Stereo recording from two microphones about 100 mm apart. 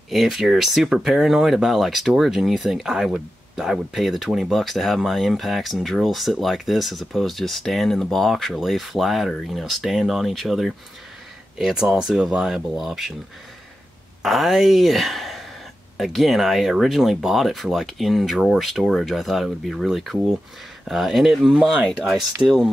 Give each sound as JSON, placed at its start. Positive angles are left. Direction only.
{"t": 0.1, "sound": "speech", "side_deg": 0}
{"t": 14.2, "sound": "speech", "side_deg": 0}